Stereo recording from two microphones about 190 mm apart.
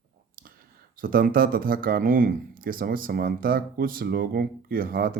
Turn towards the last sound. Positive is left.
turn(degrees=-50)  # may be behind; listen again after turning